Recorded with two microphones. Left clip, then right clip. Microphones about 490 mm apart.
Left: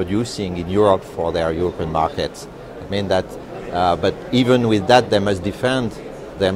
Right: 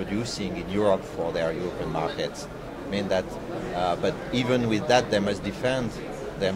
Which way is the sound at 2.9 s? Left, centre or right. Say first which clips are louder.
Left 7 dB; left.